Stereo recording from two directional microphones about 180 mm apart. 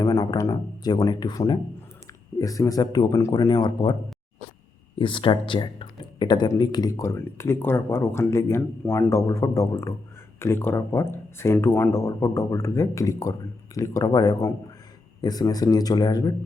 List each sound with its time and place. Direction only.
0.0 s speech: 20° left (ahead or behind)
4.9 s speech: 30° left (ahead or behind)